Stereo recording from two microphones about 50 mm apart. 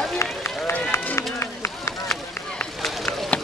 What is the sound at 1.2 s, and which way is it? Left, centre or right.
Run, left.